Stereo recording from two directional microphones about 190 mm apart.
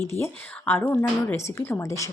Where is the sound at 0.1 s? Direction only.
10° left (ahead or behind).